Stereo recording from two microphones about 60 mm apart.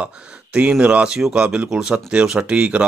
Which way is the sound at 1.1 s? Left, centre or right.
Centre.